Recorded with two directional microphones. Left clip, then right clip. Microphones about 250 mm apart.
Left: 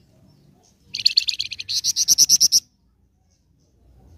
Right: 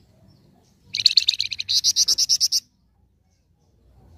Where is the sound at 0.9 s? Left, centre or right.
Centre.